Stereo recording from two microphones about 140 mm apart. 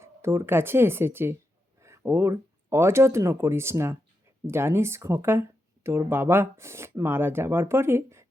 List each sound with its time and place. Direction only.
0.0 s speech: 20° right (ahead or behind)